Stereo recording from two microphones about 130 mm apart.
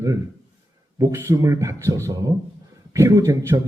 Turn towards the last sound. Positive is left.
turn(degrees=-25)  # may be behind; listen again after turning